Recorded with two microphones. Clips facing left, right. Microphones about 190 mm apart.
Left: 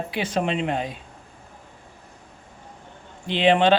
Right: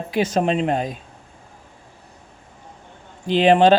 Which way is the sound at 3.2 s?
40° right (ahead or behind).